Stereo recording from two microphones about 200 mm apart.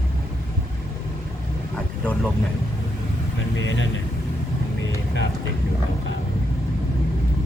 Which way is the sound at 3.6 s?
65° left (ahead or behind).